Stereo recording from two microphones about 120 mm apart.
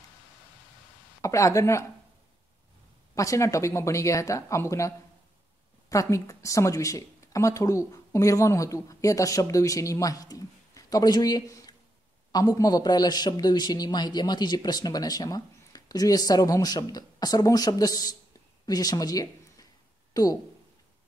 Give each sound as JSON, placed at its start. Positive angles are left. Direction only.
{"t": 1.2, "sound": "speech", "side_deg": 25}
{"t": 3.2, "sound": "a man's voice", "side_deg": 25}